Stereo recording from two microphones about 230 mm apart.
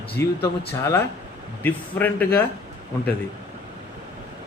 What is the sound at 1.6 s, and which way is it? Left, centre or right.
Speech, centre.